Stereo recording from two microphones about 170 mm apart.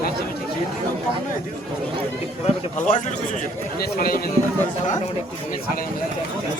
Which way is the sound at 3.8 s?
60° left (ahead or behind).